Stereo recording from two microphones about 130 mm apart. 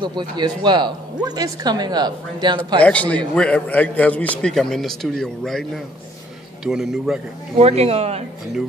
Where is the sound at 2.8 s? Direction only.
10° left (ahead or behind).